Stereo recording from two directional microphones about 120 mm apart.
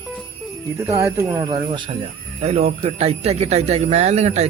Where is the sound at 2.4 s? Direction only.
65° right (ahead or behind).